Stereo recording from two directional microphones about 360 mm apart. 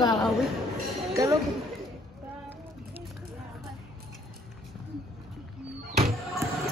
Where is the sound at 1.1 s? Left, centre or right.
Centre.